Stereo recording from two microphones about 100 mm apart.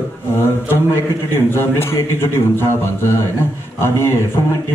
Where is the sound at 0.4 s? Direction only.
25° left (ahead or behind).